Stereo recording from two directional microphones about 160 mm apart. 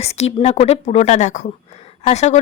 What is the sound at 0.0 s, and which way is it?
Speech, 40° left (ahead or behind).